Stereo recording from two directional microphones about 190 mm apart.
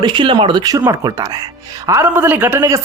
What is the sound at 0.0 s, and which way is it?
A man's voice, 25° right (ahead or behind).